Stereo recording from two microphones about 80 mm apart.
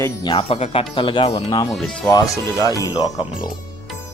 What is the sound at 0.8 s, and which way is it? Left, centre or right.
Speech, left.